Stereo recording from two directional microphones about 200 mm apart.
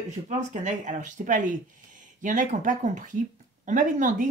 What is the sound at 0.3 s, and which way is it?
Speech, 35° right (ahead or behind).